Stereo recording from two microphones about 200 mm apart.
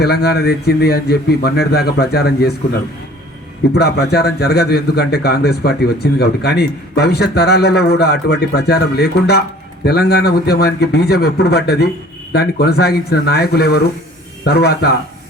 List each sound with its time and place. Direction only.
0.0 s a man's voice: 55° left (ahead or behind)
3.8 s a man's voice: 55° left (ahead or behind)